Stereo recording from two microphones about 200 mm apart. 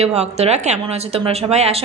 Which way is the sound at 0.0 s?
30° right (ahead or behind).